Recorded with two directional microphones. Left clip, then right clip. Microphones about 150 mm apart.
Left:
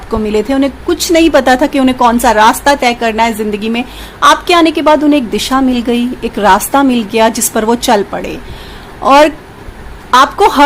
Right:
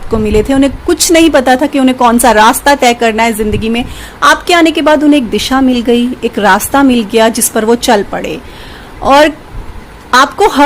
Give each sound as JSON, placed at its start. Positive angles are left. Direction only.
{"t": 0.1, "sound": "a woman's voice", "side_deg": -10}
{"t": 0.9, "sound": "a woman's voice", "side_deg": -20}
{"t": 1.3, "sound": "a woman's voice", "side_deg": 0}